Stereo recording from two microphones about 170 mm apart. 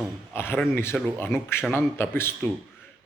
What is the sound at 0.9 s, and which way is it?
Speech, 5° left (ahead or behind).